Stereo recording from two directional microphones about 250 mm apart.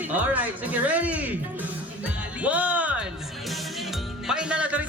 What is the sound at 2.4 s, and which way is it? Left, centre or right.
Speech, centre.